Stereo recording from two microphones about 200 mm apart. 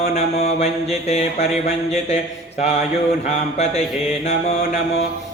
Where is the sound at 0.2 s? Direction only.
30° left (ahead or behind).